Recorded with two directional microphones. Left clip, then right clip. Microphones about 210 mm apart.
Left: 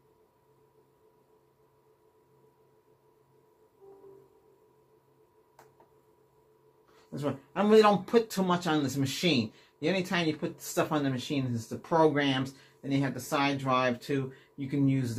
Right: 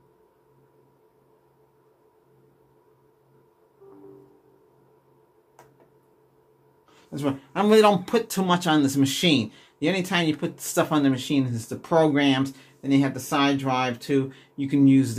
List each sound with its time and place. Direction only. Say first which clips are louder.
7.1 s speech: right 6 dB; 35° right (ahead or behind)